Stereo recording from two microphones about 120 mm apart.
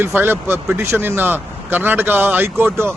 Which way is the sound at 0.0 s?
20° right (ahead or behind).